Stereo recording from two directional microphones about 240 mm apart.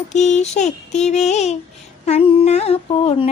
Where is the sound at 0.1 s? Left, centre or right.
Left.